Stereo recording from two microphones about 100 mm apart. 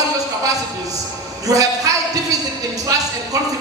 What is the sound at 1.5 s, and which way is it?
Music, 35° right (ahead or behind).